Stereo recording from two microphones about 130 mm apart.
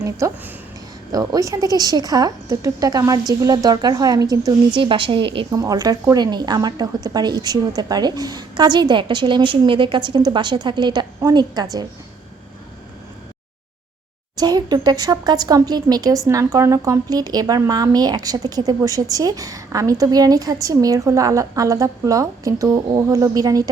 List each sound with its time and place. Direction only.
0.2 s a woman's voice: 25° right (ahead or behind)
4.8 s a woman's voice: 40° right (ahead or behind)
5.5 s a woman's voice: 25° right (ahead or behind)
14.3 s a woman's voice: 30° right (ahead or behind)